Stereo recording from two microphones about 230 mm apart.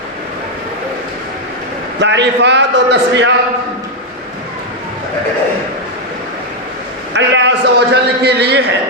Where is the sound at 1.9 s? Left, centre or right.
Right.